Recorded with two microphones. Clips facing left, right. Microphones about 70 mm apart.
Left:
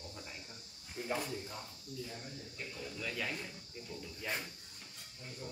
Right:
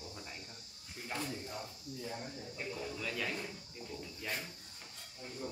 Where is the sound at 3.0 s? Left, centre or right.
Centre.